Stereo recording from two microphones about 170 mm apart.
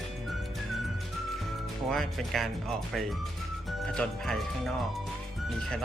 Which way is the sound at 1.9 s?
Centre (ahead or behind).